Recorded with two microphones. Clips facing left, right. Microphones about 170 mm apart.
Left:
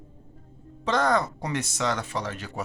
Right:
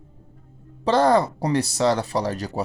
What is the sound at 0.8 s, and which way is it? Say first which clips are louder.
Speech: right 6 dB; 30° right (ahead or behind).